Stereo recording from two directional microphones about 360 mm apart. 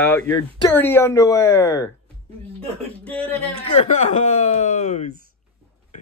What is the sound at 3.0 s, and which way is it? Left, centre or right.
Speech, centre.